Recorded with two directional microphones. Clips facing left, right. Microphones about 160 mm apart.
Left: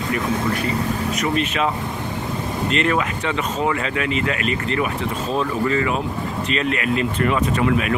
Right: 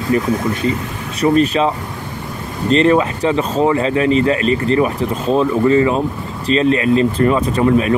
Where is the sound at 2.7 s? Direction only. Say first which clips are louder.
Right 10 dB; 35° right (ahead or behind).